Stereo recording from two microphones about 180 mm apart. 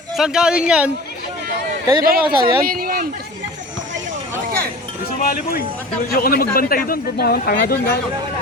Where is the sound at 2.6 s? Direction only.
55° right (ahead or behind).